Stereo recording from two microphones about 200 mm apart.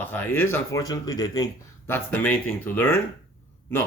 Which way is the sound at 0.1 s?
10° left (ahead or behind).